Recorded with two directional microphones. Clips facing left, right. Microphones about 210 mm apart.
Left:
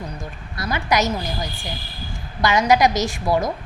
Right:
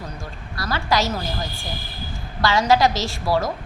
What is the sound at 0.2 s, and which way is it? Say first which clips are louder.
A woman's voice: left 1 dB; 20° left (ahead or behind).